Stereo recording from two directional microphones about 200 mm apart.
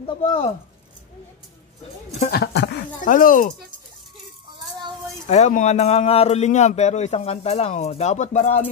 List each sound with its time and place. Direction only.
0.0 s speech: 30° left (ahead or behind)
2.3 s speech: 55° left (ahead or behind)
3.0 s speech: 40° left (ahead or behind)
5.2 s speech: 35° left (ahead or behind)